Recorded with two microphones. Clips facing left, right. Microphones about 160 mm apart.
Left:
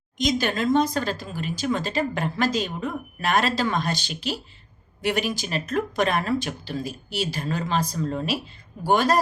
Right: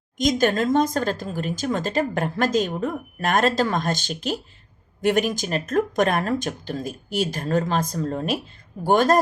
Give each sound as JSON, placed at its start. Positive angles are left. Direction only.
{"t": 0.2, "sound": "speech", "side_deg": -50}